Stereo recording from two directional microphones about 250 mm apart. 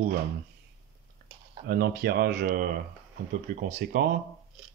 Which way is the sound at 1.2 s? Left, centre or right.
Right.